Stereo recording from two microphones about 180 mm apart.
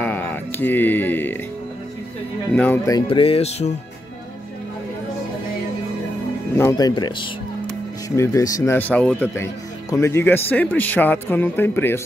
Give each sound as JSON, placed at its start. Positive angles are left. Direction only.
{"t": 0.0, "sound": "music", "side_deg": 10}
{"t": 2.5, "sound": "speech", "side_deg": 10}
{"t": 3.1, "sound": "music", "side_deg": 30}
{"t": 6.5, "sound": "speech", "side_deg": 20}